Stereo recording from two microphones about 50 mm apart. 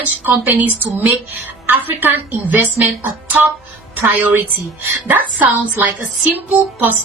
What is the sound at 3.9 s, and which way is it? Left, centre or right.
A woman's voice, right.